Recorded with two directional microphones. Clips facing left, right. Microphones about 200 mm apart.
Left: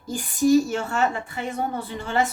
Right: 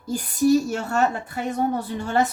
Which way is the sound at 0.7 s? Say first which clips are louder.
Right 1 dB; 45° right (ahead or behind).